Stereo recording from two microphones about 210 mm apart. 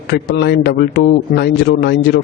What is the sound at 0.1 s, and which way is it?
A man's voice, 50° left (ahead or behind).